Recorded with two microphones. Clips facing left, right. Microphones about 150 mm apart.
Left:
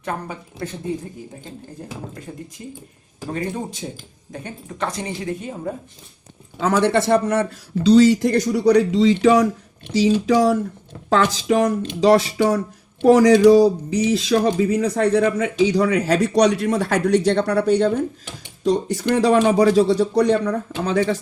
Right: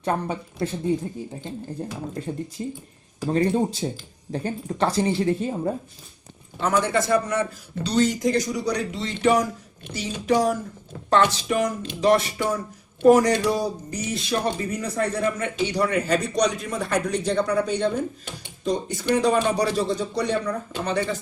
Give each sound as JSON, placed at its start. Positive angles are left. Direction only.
{"t": 0.0, "sound": "speech", "side_deg": -30}
{"t": 2.6, "sound": "a woman's voice", "side_deg": -30}
{"t": 6.6, "sound": "speech", "side_deg": 90}
{"t": 7.9, "sound": "speech", "side_deg": 85}